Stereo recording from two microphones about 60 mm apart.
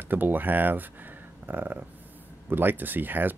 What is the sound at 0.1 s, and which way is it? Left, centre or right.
Speech, right.